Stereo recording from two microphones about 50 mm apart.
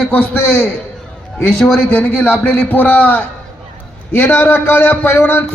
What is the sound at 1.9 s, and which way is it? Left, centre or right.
A man's voice, left.